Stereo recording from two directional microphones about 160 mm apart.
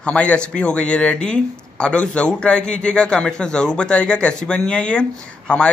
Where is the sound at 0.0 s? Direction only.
5° left (ahead or behind).